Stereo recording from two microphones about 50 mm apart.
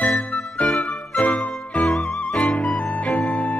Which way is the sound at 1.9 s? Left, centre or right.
Centre.